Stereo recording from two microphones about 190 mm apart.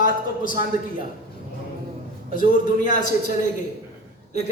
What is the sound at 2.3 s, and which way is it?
Speech, 45° left (ahead or behind).